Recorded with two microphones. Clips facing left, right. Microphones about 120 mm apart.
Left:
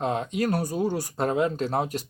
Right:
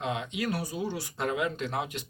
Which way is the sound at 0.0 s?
40° left (ahead or behind).